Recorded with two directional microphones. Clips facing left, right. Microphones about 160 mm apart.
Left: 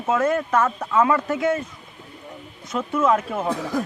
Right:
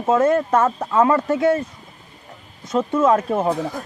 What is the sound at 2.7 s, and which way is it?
Speech, 30° right (ahead or behind).